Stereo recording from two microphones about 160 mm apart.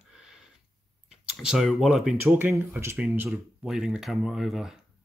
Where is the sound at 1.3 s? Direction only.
Centre (ahead or behind).